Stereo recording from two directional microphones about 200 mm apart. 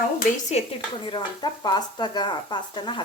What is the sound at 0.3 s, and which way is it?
Speech, 35° left (ahead or behind).